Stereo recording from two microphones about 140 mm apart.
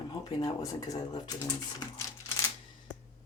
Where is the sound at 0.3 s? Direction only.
25° left (ahead or behind).